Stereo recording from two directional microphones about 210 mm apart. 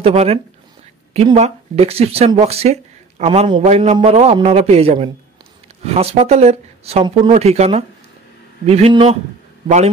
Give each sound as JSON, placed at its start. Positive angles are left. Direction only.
{"t": 0.0, "sound": "speech", "side_deg": -30}